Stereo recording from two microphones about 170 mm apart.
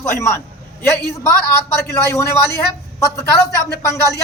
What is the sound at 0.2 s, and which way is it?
A man's voice, 15° left (ahead or behind).